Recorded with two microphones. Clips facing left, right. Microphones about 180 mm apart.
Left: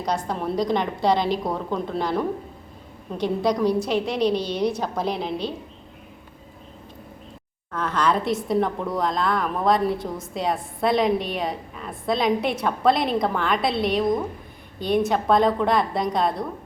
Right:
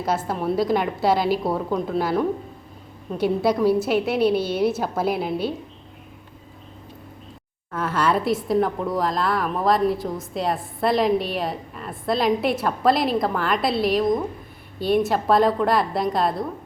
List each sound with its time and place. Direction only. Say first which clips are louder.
0.0 s a woman's voice: right 2 dB; 5° right (ahead or behind)
7.7 s a woman's voice: right 1 dB; 5° right (ahead or behind)